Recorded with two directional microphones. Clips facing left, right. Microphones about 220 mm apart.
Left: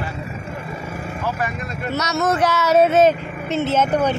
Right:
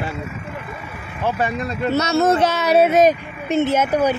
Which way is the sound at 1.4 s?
30° right (ahead or behind).